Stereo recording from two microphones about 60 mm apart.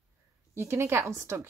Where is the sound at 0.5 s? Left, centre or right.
Right.